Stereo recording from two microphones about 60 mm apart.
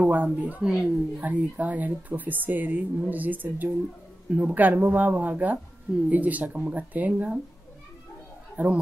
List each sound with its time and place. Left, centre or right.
0.1 s speech: right
8.6 s speech: right